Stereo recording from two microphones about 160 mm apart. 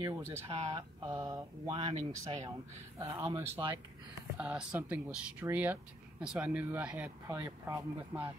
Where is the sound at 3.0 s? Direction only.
20° right (ahead or behind).